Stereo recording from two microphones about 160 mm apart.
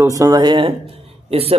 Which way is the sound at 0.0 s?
20° right (ahead or behind).